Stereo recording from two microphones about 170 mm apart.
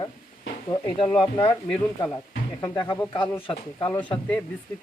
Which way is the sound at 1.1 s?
25° left (ahead or behind).